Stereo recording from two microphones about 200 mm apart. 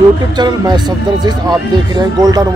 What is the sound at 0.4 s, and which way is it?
Speech, 20° right (ahead or behind).